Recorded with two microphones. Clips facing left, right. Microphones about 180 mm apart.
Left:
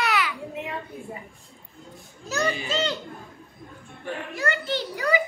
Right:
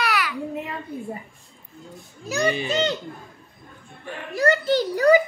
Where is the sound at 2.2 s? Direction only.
15° right (ahead or behind).